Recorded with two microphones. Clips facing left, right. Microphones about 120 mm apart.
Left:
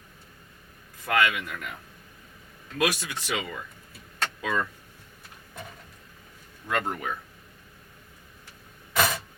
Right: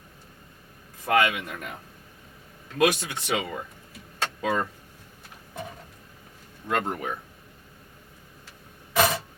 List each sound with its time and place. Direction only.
1.0 s speech: 25° right (ahead or behind)
6.7 s speech: 30° right (ahead or behind)
9.0 s a sound: 20° right (ahead or behind)